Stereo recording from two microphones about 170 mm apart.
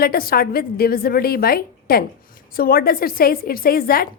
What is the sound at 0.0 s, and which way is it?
A woman's voice, 60° left (ahead or behind).